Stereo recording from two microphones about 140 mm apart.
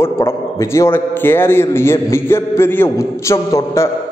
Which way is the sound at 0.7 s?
15° left (ahead or behind).